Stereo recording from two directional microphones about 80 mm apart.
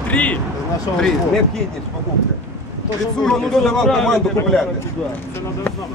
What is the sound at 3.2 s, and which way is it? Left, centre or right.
Speech, centre.